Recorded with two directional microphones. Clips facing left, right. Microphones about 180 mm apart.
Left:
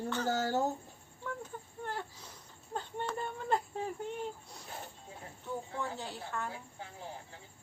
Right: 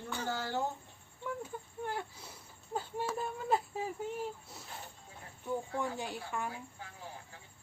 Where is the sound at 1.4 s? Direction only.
10° right (ahead or behind).